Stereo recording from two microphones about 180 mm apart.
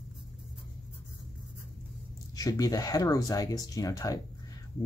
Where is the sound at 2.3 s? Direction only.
20° left (ahead or behind).